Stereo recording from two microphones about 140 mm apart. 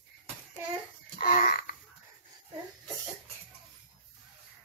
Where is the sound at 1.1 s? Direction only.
60° left (ahead or behind).